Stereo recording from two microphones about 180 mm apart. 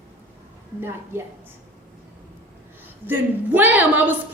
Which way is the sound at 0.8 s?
15° right (ahead or behind).